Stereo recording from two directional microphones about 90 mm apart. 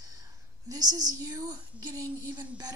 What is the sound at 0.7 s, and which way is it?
A woman's voice, 45° right (ahead or behind).